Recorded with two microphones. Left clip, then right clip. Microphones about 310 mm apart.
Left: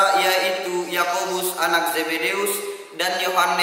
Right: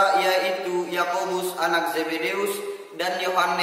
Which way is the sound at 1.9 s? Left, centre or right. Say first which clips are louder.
Left 3 dB; centre.